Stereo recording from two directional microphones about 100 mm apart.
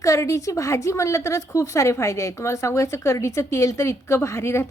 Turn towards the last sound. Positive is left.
turn(degrees=25)  # may be behind; listen again after turning